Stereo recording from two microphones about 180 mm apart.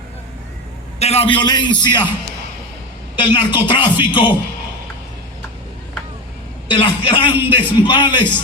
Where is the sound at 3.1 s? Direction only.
25° left (ahead or behind).